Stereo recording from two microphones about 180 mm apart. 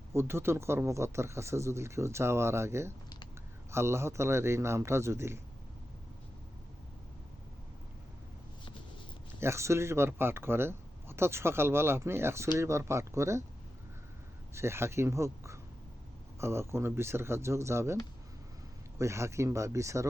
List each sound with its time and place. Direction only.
0.1 s speech: 15° right (ahead or behind)
9.4 s speech: 15° right (ahead or behind)
14.5 s speech: 15° right (ahead or behind)
18.9 s speech: 15° right (ahead or behind)